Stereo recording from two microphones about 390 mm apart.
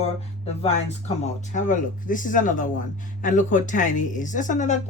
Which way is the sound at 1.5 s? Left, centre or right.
Centre.